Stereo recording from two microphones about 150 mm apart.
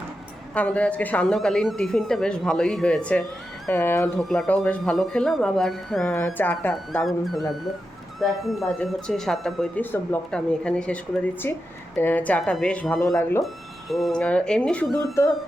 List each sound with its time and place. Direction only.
0.5 s speech: 10° left (ahead or behind)
4.2 s speech: 5° left (ahead or behind)
7.0 s speech: centre (ahead or behind)
9.8 s speech: 10° left (ahead or behind)
15.2 s music: 20° left (ahead or behind)